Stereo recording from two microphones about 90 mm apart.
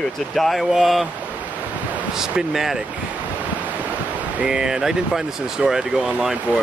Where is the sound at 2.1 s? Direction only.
5° right (ahead or behind).